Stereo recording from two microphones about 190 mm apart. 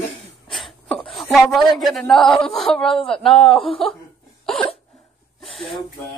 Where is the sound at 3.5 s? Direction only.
30° left (ahead or behind).